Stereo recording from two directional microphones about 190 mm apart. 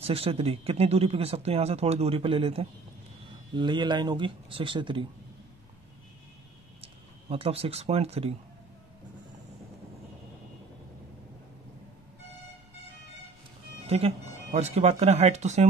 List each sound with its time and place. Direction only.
0.0 s speech: 30° right (ahead or behind)
6.8 s speech: 30° right (ahead or behind)
13.8 s speech: 30° right (ahead or behind)